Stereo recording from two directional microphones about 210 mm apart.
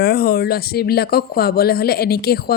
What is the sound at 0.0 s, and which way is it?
Speech, 45° left (ahead or behind).